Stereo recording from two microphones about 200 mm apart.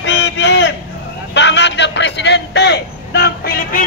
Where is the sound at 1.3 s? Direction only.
60° left (ahead or behind).